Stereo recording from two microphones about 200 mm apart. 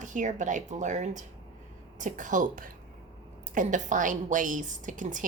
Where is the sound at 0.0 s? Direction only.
40° right (ahead or behind).